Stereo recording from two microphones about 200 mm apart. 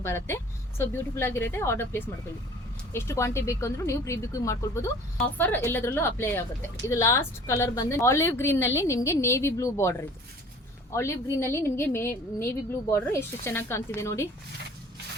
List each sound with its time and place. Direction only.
0.0 s speech: 10° left (ahead or behind)